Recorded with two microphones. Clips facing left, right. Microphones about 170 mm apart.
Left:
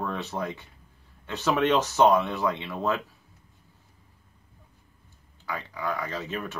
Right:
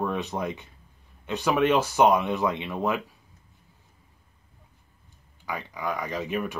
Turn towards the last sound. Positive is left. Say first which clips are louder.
# right 4 dB
turn(degrees=-15)  # may be behind; listen again after turning